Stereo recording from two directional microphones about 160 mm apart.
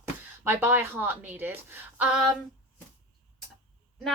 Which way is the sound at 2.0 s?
5° right (ahead or behind).